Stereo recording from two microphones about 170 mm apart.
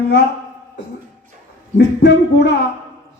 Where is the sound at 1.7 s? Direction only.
85° left.